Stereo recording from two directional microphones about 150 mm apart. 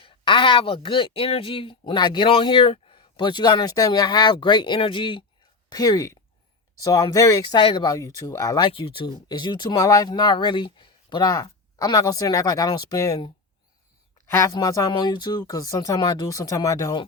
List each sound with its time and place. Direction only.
0.0 s speech: 35° left (ahead or behind)
7.9 s speech: 25° left (ahead or behind)